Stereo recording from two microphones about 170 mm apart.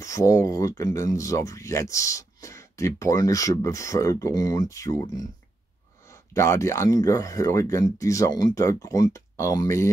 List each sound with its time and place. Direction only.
0.0 s speech: 20° left (ahead or behind)